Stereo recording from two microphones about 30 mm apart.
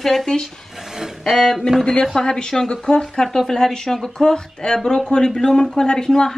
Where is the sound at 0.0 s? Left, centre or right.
Centre.